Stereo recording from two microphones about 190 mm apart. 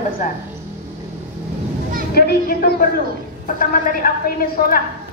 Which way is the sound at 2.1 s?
55° left (ahead or behind).